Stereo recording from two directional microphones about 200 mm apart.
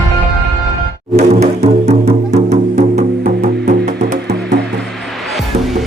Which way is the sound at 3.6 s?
45° right (ahead or behind).